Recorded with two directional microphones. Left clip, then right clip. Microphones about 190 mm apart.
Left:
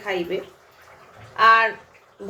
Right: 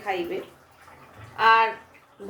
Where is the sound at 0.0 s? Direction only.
20° left (ahead or behind).